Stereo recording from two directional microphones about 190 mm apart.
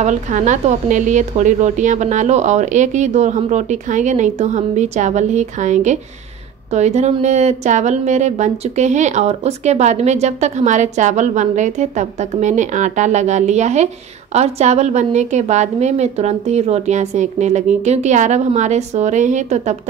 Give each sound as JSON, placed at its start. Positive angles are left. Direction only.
{"t": 0.0, "sound": "a woman's voice", "side_deg": -40}